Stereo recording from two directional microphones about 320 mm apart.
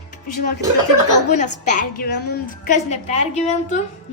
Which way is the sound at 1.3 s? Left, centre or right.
Left.